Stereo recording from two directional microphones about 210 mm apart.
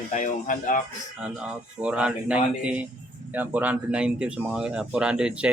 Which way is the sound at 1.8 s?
5° right (ahead or behind).